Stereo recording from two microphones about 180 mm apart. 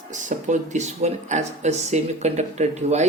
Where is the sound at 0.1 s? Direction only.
45° right (ahead or behind).